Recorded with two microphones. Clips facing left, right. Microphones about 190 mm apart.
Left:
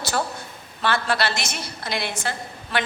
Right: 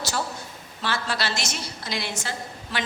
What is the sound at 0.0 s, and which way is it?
A woman's voice, 55° left (ahead or behind).